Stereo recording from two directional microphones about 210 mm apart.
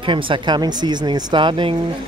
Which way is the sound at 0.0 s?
25° right (ahead or behind).